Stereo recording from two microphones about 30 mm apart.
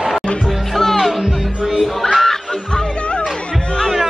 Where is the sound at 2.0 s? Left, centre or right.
Centre.